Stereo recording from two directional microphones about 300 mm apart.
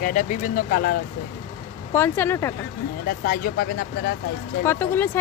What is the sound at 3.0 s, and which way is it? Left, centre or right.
Speech, left.